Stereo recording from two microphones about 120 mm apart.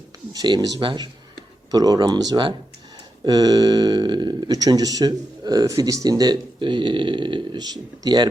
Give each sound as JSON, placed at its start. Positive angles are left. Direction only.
{"t": 0.3, "sound": "speech", "side_deg": -35}